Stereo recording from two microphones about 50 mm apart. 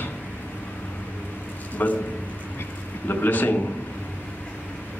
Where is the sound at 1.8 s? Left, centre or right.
Left.